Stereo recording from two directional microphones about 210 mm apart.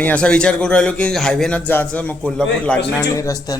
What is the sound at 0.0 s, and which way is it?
A man's voice, 5° left (ahead or behind).